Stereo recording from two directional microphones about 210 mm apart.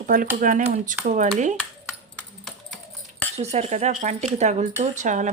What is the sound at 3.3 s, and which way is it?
Speech, 30° right (ahead or behind).